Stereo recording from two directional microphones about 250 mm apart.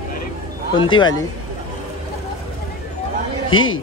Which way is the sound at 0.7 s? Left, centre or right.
Centre.